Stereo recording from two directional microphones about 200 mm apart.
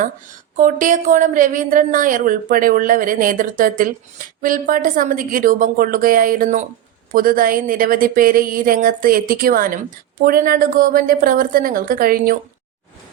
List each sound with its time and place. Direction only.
0.5 s a woman's voice: 40° right (ahead or behind)